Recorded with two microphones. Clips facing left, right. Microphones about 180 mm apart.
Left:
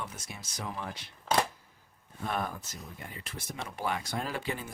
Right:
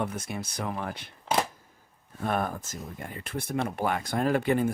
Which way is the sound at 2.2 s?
50° right (ahead or behind).